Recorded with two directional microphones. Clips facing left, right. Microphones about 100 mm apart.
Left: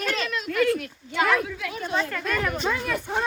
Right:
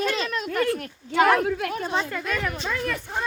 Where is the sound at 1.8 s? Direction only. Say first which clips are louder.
Left 3 dB; 30° right (ahead or behind).